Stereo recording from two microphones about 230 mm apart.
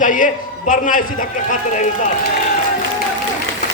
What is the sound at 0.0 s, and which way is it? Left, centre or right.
A man's voice, left.